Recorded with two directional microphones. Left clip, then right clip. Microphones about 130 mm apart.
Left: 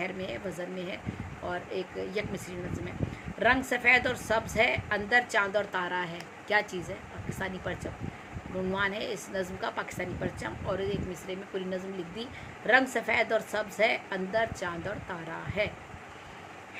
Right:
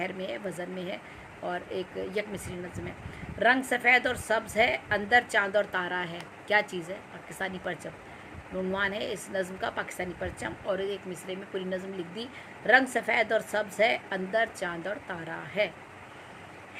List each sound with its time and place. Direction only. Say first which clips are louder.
0.0 s speech: right 1 dB; 20° right (ahead or behind)